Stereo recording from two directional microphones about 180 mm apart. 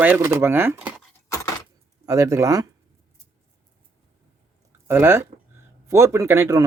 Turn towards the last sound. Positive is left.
turn(degrees=-15)  # may be behind; listen again after turning